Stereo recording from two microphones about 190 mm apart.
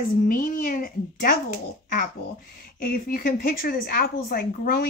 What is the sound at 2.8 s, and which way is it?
A woman's voice, 50° left (ahead or behind).